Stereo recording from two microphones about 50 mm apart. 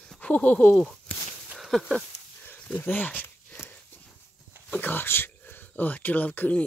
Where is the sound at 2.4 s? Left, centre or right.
Left.